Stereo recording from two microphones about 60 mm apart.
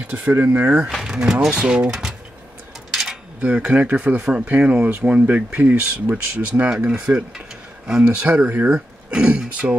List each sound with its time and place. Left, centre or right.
0.1 s speech: right
1.0 s speech: centre
2.9 s cutlery: centre
3.4 s speech: right
6.7 s speech: centre